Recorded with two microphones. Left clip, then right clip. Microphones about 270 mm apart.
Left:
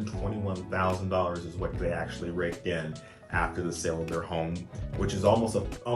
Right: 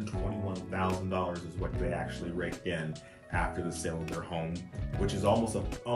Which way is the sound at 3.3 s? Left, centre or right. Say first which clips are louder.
Left 4 dB; centre.